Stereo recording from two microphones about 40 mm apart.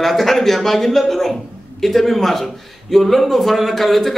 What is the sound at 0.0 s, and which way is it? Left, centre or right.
A man's voice, centre.